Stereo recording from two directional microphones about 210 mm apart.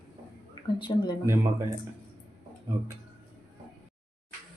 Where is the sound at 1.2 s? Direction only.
15° right (ahead or behind).